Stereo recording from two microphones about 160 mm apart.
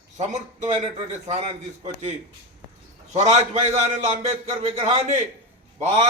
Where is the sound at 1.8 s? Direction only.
45° right (ahead or behind).